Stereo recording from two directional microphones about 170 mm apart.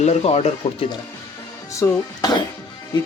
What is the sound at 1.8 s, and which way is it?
Speech, 20° left (ahead or behind).